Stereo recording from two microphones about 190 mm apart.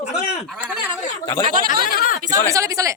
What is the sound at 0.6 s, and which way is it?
Speech, 5° right (ahead or behind).